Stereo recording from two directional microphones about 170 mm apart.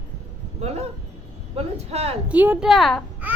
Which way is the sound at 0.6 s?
40° right (ahead or behind).